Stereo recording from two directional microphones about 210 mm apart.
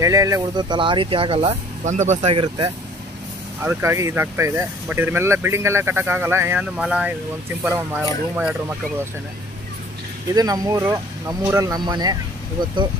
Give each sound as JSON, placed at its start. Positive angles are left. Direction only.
{"t": 0.0, "sound": "speech", "side_deg": -15}
{"t": 3.6, "sound": "speech", "side_deg": -15}
{"t": 10.3, "sound": "speech", "side_deg": -15}